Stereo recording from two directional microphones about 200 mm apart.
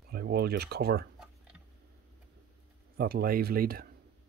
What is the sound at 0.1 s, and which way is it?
Speech, 50° right (ahead or behind).